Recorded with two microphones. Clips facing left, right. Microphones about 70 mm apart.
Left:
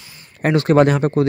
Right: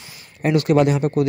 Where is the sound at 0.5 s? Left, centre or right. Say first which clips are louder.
Left 3 dB; left.